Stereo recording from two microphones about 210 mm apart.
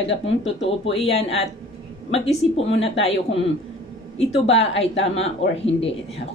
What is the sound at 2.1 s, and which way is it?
Speech, 30° left (ahead or behind).